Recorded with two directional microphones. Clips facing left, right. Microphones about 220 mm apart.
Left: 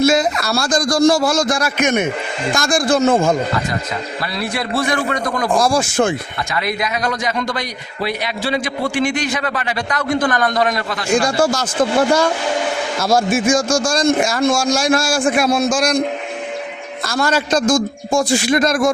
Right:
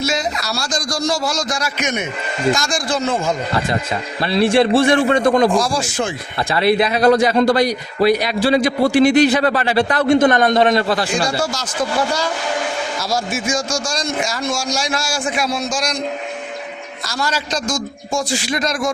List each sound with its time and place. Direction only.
0.0 s a man's voice: 55° left (ahead or behind)
4.3 s a man's voice: 30° right (ahead or behind)
5.5 s a man's voice: 55° left (ahead or behind)
6.5 s a man's voice: 30° right (ahead or behind)
11.3 s a man's voice: 50° left (ahead or behind)
17.1 s a man's voice: 55° left (ahead or behind)